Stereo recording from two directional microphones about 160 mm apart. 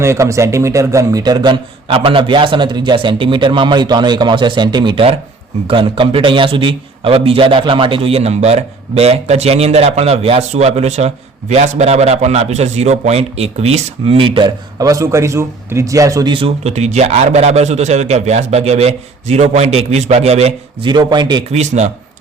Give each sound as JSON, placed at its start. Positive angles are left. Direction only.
{"t": 0.0, "sound": "a man's voice", "side_deg": -15}
{"t": 20.9, "sound": "a man's voice", "side_deg": -30}
{"t": 21.5, "sound": "speech", "side_deg": -45}